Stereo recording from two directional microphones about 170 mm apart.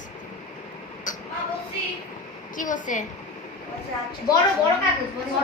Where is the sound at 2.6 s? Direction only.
50° left (ahead or behind).